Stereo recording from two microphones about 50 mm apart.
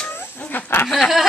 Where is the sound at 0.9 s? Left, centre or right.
Centre.